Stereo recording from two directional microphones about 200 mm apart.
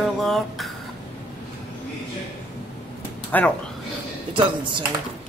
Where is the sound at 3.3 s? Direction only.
10° left (ahead or behind).